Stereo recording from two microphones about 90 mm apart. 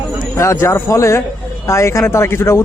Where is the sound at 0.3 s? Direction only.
35° left (ahead or behind).